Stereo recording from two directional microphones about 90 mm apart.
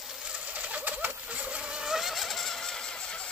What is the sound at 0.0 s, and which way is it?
Gobble, 5° right (ahead or behind).